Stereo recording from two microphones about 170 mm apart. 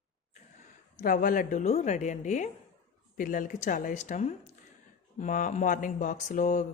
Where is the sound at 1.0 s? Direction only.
55° left (ahead or behind).